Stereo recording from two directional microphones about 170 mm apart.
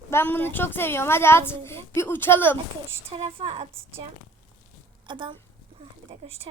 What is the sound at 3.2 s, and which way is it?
Speech, 35° right (ahead or behind).